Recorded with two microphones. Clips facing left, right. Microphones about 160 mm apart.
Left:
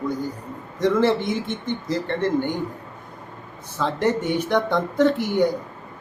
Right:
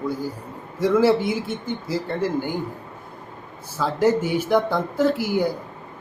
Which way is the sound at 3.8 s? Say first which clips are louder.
Right 2 dB; 5° right (ahead or behind).